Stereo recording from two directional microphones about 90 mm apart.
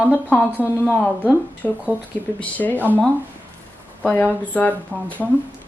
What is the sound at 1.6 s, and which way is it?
Speech, 15° left (ahead or behind).